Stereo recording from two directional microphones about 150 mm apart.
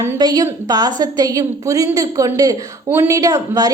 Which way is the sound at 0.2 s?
25° right (ahead or behind).